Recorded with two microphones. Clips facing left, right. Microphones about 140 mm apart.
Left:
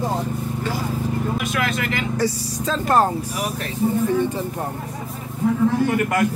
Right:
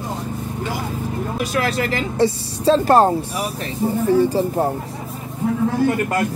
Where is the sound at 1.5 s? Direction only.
35° right (ahead or behind).